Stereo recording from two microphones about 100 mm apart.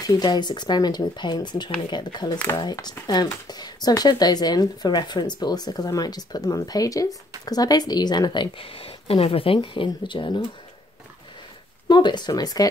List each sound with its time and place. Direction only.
0.0 s speech: 40° left (ahead or behind)
8.6 s speech: 70° left (ahead or behind); by 10.4 s 55° left (ahead or behind)
11.9 s speech: 45° left (ahead or behind)